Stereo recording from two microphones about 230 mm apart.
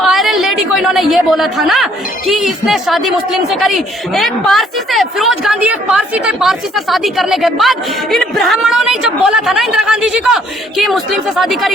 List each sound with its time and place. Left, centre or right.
0.0 s a woman's voice: centre